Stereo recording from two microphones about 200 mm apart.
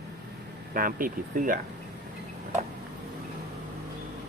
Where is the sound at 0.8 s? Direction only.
45° right (ahead or behind).